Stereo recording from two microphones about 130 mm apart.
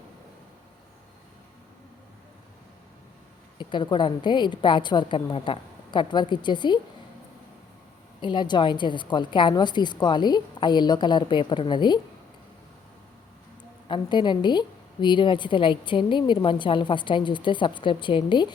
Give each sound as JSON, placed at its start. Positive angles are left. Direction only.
{"t": 3.6, "sound": "a woman's voice", "side_deg": 35}
{"t": 8.2, "sound": "a woman's voice", "side_deg": 35}
{"t": 13.8, "sound": "a woman's voice", "side_deg": 40}